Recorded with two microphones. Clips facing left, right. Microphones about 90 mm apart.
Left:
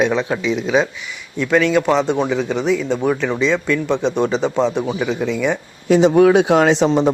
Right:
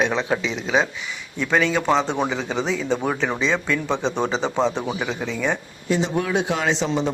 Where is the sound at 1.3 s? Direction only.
5° right (ahead or behind).